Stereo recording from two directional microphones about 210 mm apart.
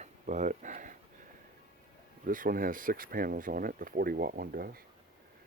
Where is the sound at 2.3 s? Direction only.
40° right (ahead or behind).